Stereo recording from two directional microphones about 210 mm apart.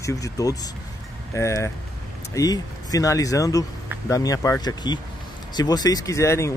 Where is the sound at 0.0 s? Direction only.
15° left (ahead or behind).